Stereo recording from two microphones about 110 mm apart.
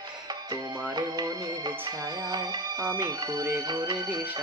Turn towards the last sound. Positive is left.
turn(degrees=-40)  # may be behind; listen again after turning